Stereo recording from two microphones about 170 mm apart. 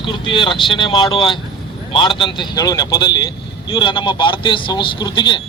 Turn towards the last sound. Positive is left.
turn(degrees=25)  # may be behind; listen again after turning